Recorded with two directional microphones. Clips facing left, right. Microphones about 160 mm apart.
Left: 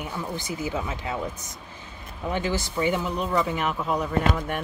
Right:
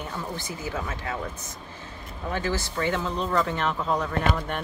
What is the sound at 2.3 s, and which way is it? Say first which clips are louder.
Speech: left 1 dB; 15° left (ahead or behind).